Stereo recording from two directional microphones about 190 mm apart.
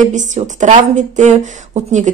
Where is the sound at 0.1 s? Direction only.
40° right (ahead or behind).